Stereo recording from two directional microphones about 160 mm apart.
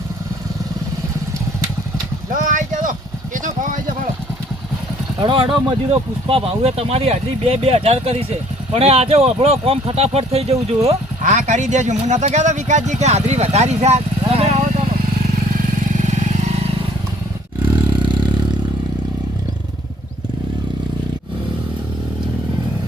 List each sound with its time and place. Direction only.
2.3 s a sound: 55° right (ahead or behind)
5.2 s speech: 35° right (ahead or behind)
14.8 s vehicle: 60° right (ahead or behind)
16.0 s vehicle: 45° right (ahead or behind)
17.7 s vehicle: 30° right (ahead or behind)